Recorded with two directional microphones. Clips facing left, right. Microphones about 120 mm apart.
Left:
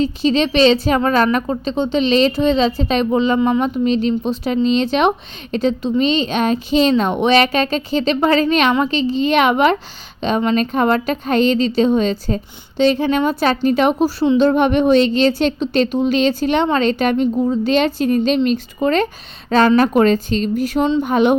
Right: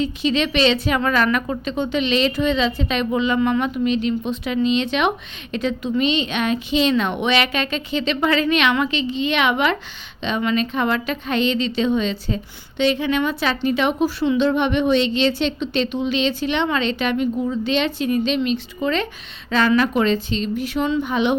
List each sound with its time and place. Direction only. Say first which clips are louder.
0.0 s a woman's voice: left 4 dB; 35° left (ahead or behind)